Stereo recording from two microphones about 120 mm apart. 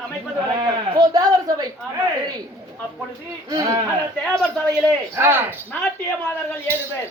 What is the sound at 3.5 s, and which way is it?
Speech, 30° right (ahead or behind).